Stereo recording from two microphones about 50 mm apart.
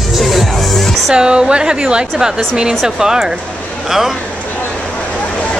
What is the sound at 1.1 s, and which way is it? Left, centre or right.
A woman's voice, centre.